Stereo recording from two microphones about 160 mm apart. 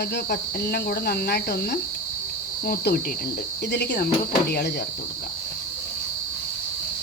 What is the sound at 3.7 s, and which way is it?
Cricket, 90° left.